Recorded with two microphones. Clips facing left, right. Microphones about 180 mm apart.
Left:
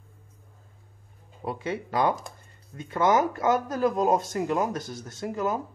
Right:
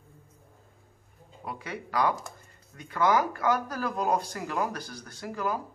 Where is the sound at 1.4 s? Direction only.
25° left (ahead or behind).